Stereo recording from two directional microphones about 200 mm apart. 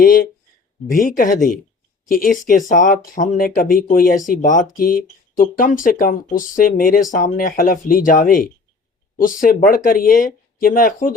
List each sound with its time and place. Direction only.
0.0 s speech: 45° left (ahead or behind)